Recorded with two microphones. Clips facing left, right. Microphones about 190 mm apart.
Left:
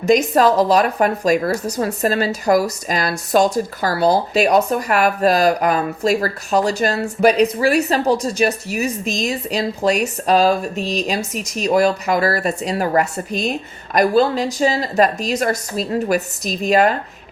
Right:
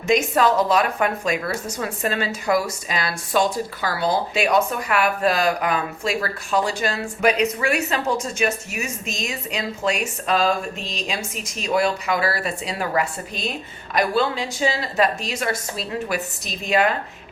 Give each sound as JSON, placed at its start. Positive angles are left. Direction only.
{"t": 0.0, "sound": "a woman's voice", "side_deg": 40}